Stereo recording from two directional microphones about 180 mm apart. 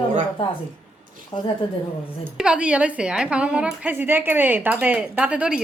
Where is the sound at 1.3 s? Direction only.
30° left (ahead or behind).